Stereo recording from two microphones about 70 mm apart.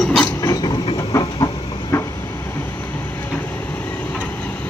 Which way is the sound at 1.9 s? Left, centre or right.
Left.